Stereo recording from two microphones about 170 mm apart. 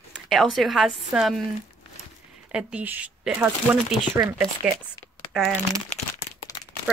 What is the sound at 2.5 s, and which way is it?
Speech, 10° right (ahead or behind).